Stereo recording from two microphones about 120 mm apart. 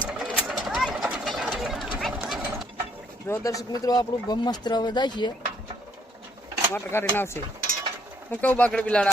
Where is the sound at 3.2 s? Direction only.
30° left (ahead or behind).